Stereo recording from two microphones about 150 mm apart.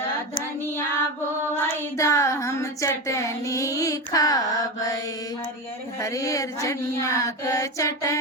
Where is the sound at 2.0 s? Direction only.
20° left (ahead or behind).